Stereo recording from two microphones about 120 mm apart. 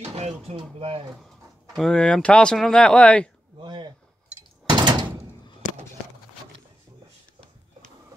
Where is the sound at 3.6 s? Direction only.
40° right (ahead or behind).